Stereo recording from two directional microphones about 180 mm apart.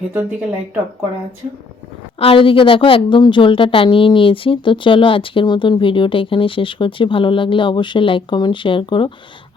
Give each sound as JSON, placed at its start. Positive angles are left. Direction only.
{"t": 0.1, "sound": "speech", "side_deg": -10}
{"t": 2.1, "sound": "a woman's voice", "side_deg": 30}